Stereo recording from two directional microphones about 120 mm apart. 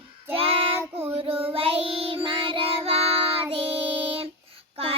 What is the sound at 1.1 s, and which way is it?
Child singing, 55° right (ahead or behind).